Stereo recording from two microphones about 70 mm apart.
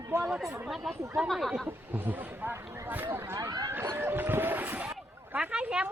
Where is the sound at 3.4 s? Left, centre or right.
Right.